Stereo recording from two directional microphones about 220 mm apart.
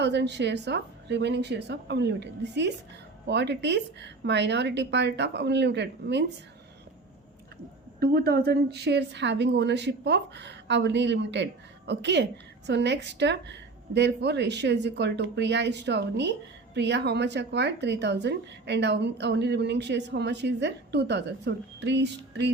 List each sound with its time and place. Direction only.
0.0 s speech: 50° right (ahead or behind)
7.9 s speech: 45° right (ahead or behind)